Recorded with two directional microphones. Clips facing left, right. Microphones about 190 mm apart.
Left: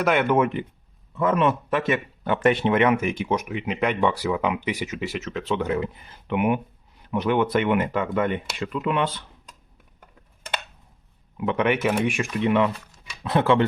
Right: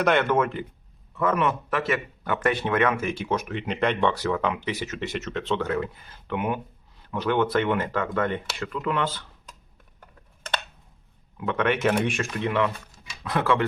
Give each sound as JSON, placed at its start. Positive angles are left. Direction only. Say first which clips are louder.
{"t": 0.0, "sound": "speech", "louder": "left 1 dB", "side_deg": 5}
{"t": 11.3, "sound": "speech", "louder": "left 2 dB", "side_deg": 15}